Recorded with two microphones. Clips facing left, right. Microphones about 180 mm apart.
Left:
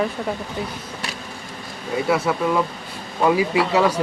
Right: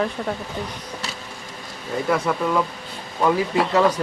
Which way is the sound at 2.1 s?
5° left (ahead or behind).